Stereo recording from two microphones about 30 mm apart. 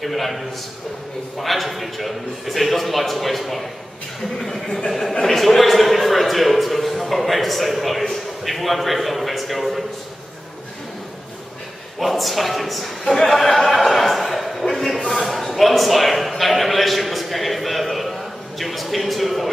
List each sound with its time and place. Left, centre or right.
0.0 s a man's voice: centre
4.7 s a man's voice: centre
12.0 s a man's voice: centre
13.3 s a sound: centre
14.6 s a man's voice: centre